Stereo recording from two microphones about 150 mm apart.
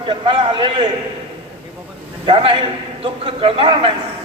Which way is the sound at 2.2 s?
35° right (ahead or behind).